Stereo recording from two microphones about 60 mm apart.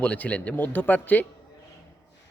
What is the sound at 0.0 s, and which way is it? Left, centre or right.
Speech, left.